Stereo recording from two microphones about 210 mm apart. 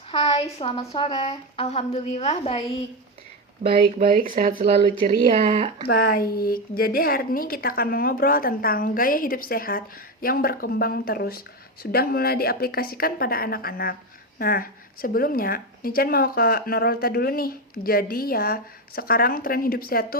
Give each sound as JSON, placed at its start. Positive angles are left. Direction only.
{"t": 0.1, "sound": "a woman's voice", "side_deg": 25}
{"t": 3.6, "sound": "speech", "side_deg": -25}
{"t": 4.0, "sound": "speech", "side_deg": -40}
{"t": 5.9, "sound": "a woman's voice", "side_deg": 45}